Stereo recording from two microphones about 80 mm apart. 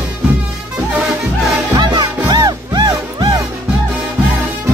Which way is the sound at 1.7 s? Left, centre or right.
Right.